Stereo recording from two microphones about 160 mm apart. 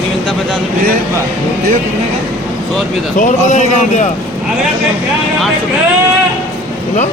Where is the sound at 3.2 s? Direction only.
50° left (ahead or behind).